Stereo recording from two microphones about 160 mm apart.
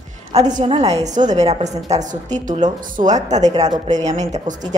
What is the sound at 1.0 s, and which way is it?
A woman's voice, 50° right (ahead or behind).